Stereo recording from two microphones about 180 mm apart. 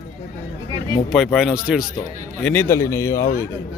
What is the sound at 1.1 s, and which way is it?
Speech, centre (ahead or behind).